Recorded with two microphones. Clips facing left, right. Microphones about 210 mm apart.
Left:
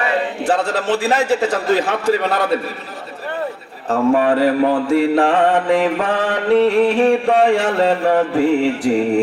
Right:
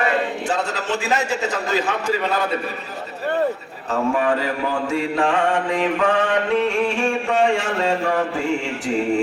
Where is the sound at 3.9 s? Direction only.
55° left (ahead or behind).